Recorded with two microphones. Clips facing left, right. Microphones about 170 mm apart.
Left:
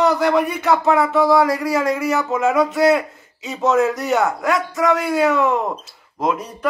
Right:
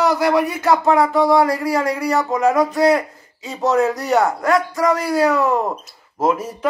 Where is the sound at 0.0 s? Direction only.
Centre (ahead or behind).